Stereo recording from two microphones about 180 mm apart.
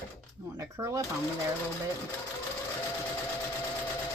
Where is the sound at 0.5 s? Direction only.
15° right (ahead or behind).